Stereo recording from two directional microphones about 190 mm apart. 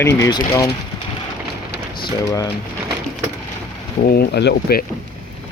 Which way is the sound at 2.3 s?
15° left (ahead or behind).